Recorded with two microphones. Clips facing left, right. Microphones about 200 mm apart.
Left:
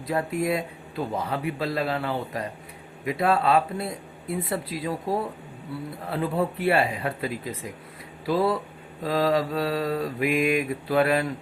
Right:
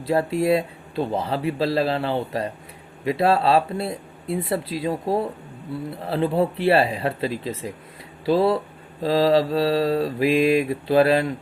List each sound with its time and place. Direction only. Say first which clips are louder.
0.0 s speech: right 5 dB; 30° right (ahead or behind)